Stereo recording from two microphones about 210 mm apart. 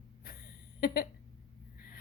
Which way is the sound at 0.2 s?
45° left (ahead or behind).